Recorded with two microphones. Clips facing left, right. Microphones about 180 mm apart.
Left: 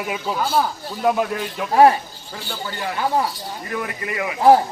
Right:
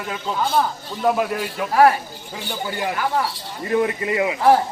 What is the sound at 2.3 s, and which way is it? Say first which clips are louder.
Speech: right 3 dB; 15° right (ahead or behind).